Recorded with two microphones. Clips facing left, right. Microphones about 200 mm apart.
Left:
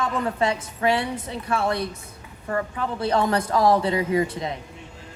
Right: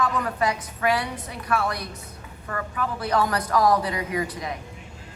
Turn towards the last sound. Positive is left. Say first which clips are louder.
# left 5 dB
turn(degrees=25)  # may be behind; listen again after turning